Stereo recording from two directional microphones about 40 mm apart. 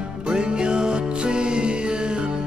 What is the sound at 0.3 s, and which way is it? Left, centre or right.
Music, right.